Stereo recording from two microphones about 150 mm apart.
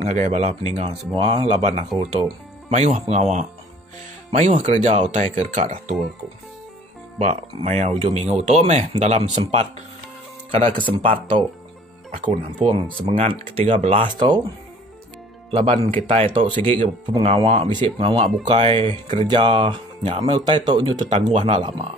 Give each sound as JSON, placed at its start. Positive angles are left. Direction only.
{"t": 0.0, "sound": "speech", "side_deg": -45}
{"t": 2.7, "sound": "speech", "side_deg": -50}
{"t": 7.2, "sound": "speech", "side_deg": -50}
{"t": 10.9, "sound": "speech", "side_deg": -35}
{"t": 12.6, "sound": "speech", "side_deg": -30}
{"t": 15.5, "sound": "speech", "side_deg": -35}
{"t": 21.3, "sound": "speech", "side_deg": -45}